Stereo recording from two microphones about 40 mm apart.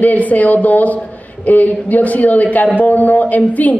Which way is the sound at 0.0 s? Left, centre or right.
Left.